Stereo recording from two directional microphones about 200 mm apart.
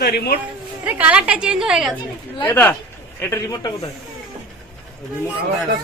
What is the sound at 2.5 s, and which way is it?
A man's voice, 10° left (ahead or behind).